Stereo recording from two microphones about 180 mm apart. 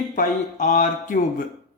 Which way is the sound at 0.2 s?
45° left (ahead or behind).